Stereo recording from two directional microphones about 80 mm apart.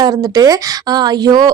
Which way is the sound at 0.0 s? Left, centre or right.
Right.